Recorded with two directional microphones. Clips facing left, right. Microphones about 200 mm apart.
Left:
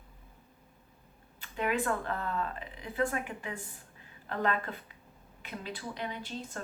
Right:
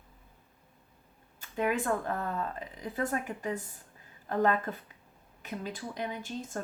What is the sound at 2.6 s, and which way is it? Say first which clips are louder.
Speech: left 1 dB; 40° right (ahead or behind).